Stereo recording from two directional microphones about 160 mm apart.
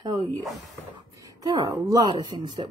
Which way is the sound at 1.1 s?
20° right (ahead or behind).